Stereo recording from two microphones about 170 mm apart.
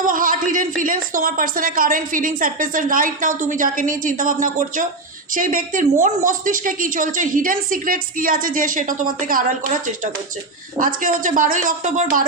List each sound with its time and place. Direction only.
0.0 s speech: 55° right (ahead or behind)